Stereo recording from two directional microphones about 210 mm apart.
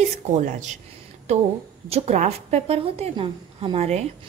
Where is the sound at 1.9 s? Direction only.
30° right (ahead or behind).